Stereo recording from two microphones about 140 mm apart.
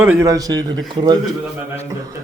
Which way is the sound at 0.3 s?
25° right (ahead or behind).